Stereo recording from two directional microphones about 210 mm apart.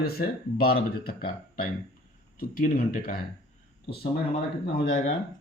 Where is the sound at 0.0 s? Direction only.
45° left (ahead or behind).